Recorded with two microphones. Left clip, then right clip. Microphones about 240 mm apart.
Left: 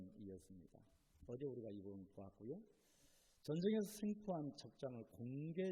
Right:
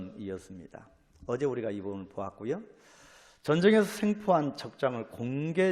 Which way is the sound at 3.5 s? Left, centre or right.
Right.